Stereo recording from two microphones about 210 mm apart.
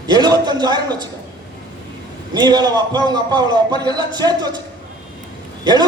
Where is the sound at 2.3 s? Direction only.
20° right (ahead or behind).